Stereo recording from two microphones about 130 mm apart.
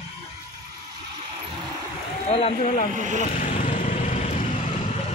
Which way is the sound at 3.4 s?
80° left.